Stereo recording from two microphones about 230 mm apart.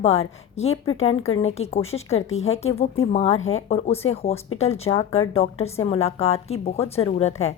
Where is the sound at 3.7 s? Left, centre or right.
Left.